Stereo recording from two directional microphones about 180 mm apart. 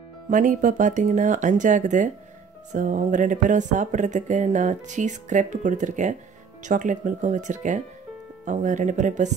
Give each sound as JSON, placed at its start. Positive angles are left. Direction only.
{"t": 0.3, "sound": "speech", "side_deg": -45}